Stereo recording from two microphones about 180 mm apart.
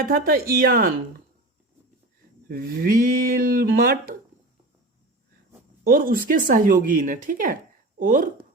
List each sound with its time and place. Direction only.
0.0 s speech: 55° right (ahead or behind)
2.5 s speech: 55° right (ahead or behind)
5.8 s speech: 55° right (ahead or behind)